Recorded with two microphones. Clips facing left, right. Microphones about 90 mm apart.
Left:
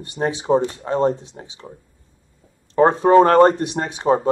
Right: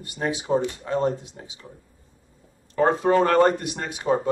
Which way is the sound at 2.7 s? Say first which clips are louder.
Left 7 dB; 40° left (ahead or behind).